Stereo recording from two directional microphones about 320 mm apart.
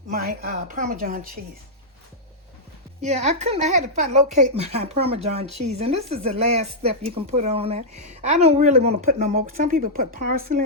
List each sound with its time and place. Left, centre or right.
0.1 s a woman's voice: right
3.0 s a woman's voice: right